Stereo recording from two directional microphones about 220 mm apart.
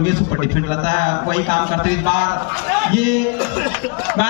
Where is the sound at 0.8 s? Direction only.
40° right (ahead or behind).